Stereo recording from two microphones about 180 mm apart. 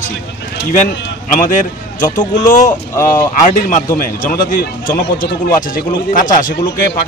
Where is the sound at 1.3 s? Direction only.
50° left (ahead or behind).